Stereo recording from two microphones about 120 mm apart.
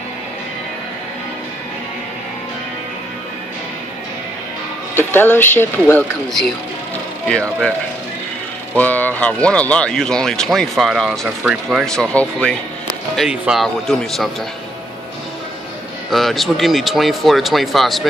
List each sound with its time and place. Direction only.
4.9 s speech: 15° left (ahead or behind)
7.2 s speech: 10° left (ahead or behind)
8.7 s speech: 15° left (ahead or behind)
11.2 s speech: 10° right (ahead or behind)
11.8 s speech: 5° left (ahead or behind)
13.3 s speech: centre (ahead or behind)
16.1 s speech: centre (ahead or behind)